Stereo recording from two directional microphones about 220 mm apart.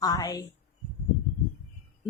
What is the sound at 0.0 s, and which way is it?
Speech, 15° left (ahead or behind).